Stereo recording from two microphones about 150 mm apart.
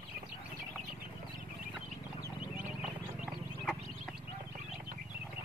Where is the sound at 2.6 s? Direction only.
10° right (ahead or behind).